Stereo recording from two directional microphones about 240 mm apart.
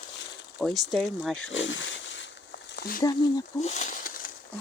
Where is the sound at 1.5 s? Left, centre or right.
Left.